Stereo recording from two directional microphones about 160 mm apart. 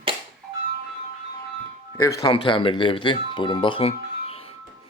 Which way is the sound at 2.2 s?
30° left (ahead or behind).